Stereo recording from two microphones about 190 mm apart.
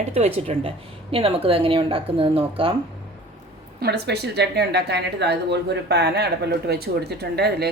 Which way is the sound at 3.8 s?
60° right (ahead or behind).